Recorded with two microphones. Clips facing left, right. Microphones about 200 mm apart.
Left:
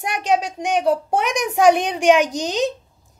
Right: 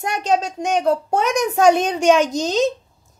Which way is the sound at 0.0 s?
15° left (ahead or behind).